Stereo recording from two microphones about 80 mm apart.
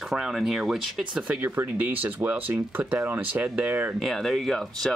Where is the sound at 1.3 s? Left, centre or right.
Right.